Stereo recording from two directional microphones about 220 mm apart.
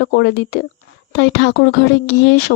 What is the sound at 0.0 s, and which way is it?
Speech, 50° left (ahead or behind).